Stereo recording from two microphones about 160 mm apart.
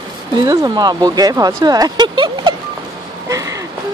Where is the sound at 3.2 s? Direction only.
20° right (ahead or behind).